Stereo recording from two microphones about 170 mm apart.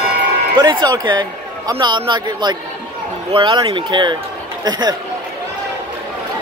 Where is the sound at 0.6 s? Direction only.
25° right (ahead or behind).